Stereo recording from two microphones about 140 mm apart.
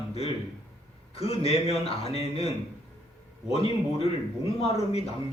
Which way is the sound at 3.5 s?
45° left (ahead or behind).